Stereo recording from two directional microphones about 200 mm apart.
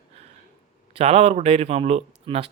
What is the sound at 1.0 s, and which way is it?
Speech, 30° right (ahead or behind).